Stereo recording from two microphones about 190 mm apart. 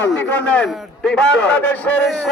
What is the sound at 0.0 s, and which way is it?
A man's voice, 10° left (ahead or behind).